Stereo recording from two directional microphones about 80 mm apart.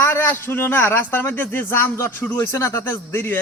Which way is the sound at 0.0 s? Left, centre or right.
Left.